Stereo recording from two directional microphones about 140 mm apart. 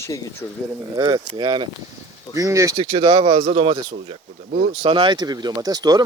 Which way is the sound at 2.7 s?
35° right (ahead or behind).